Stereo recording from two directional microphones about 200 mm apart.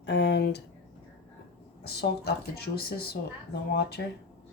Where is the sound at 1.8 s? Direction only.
50° left (ahead or behind).